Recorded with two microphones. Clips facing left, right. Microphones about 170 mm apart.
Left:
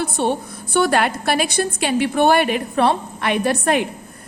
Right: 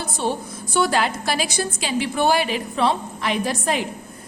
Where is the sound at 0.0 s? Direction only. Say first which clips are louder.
Left 4 dB; 60° left (ahead or behind).